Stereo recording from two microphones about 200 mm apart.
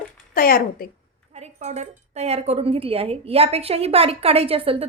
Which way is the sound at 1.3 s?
35° right (ahead or behind).